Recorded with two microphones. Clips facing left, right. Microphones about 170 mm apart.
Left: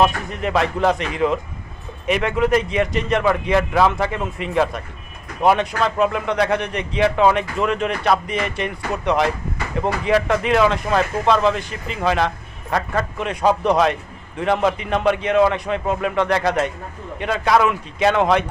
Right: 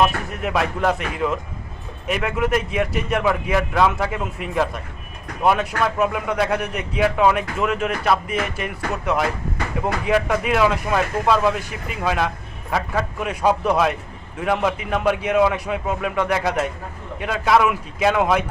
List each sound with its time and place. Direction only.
0.0 s speech: 5° right (ahead or behind)